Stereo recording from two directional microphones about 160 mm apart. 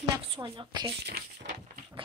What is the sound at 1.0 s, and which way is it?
Speech, 90° right.